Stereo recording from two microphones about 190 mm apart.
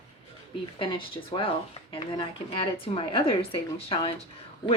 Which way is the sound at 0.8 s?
25° left (ahead or behind).